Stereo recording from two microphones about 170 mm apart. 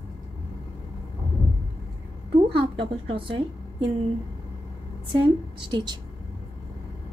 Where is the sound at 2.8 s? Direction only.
30° right (ahead or behind).